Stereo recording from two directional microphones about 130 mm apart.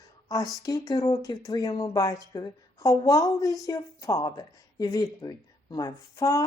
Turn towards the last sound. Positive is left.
turn(degrees=25)  # may be behind; listen again after turning